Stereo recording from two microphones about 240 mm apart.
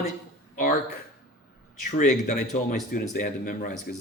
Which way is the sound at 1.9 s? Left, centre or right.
Left.